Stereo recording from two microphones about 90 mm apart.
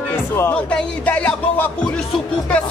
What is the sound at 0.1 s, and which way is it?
Music, 25° left (ahead or behind).